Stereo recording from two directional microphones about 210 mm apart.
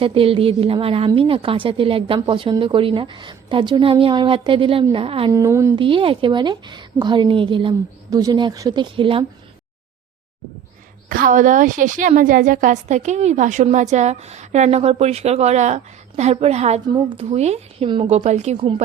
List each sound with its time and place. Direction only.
0.0 s a woman's voice: 25° right (ahead or behind)
5.3 s speech: 15° right (ahead or behind)
5.8 s a woman's voice: 25° right (ahead or behind)
11.1 s a woman's voice: 40° right (ahead or behind)